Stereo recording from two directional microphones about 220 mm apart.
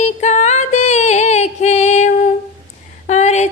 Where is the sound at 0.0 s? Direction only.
30° left (ahead or behind).